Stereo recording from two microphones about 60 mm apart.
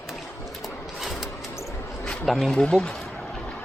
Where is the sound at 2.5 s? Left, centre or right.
Centre.